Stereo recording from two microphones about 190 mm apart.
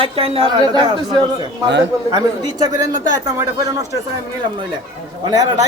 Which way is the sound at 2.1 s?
20° right (ahead or behind).